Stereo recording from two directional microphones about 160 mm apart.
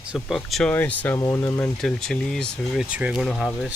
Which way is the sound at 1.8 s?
5° left (ahead or behind).